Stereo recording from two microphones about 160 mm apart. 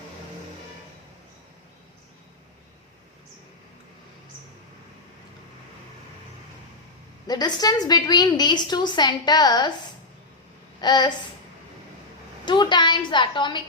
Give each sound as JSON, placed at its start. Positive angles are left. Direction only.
{"t": 7.3, "sound": "a woman's voice", "side_deg": 25}
{"t": 10.8, "sound": "a sound", "side_deg": 25}
{"t": 12.5, "sound": "a woman's voice", "side_deg": 30}